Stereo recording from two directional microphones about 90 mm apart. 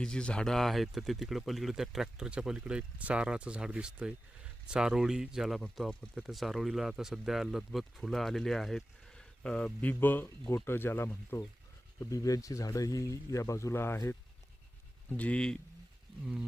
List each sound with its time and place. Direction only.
0.0 s speech: 10° left (ahead or behind)
10.0 s speech: 20° left (ahead or behind)
12.1 s speech: 40° left (ahead or behind)
15.1 s speech: 15° left (ahead or behind)
16.2 s a sound: 10° right (ahead or behind)